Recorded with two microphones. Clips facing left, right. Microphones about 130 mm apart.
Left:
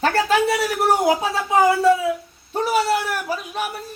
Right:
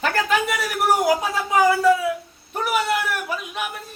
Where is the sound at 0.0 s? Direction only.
30° left (ahead or behind).